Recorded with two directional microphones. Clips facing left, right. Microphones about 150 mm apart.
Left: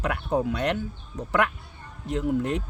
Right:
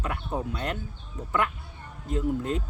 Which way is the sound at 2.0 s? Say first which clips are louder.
Left 2 dB; 75° left (ahead or behind).